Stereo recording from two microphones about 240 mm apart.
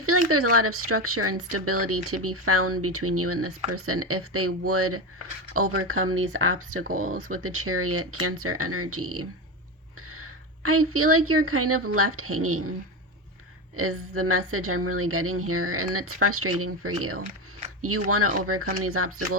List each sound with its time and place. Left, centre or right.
0.1 s a sound: right
0.5 s a woman's voice: right
6.8 s speech: right
7.3 s a woman's voice: right
13.7 s a woman's voice: right